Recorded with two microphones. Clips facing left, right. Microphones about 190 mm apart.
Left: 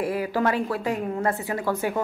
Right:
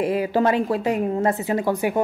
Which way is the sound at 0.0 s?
20° right (ahead or behind).